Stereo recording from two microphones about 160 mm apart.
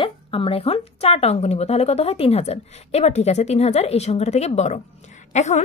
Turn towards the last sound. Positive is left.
turn(degrees=45)  # may be behind; listen again after turning